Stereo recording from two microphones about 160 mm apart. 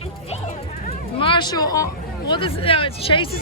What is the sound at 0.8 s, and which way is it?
Speech, 35° left (ahead or behind).